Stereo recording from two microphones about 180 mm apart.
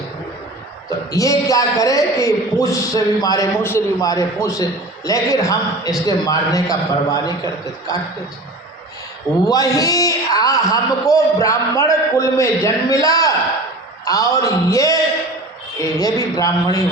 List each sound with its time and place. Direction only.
0.9 s a man's voice: 20° left (ahead or behind)
9.5 s a man's voice: 20° left (ahead or behind)